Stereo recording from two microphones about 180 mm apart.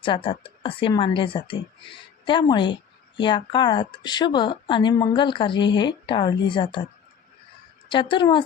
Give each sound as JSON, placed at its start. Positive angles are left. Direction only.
{"t": 0.0, "sound": "speech", "side_deg": 30}
{"t": 7.9, "sound": "speech", "side_deg": 25}